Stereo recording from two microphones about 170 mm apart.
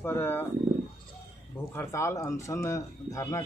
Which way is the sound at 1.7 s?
15° left (ahead or behind).